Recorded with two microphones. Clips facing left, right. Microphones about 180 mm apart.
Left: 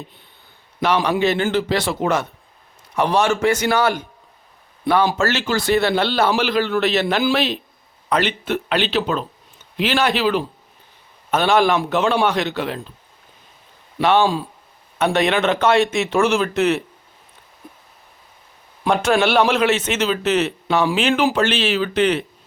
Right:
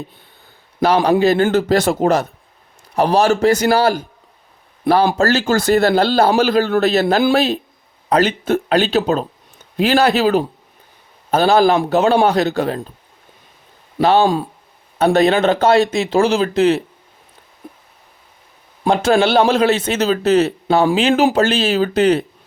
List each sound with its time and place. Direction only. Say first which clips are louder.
0.8 s a man's voice: right 5 dB; 35° right (ahead or behind)
5.1 s a man's voice: right 5 dB; 40° right (ahead or behind)
14.0 s a man's voice: right 3 dB; 35° right (ahead or behind)
18.9 s a man's voice: right 3 dB; 30° right (ahead or behind)